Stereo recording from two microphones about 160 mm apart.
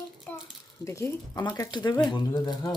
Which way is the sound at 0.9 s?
15° left (ahead or behind).